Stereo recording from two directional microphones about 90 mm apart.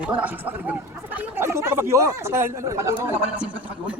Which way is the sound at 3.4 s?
15° right (ahead or behind).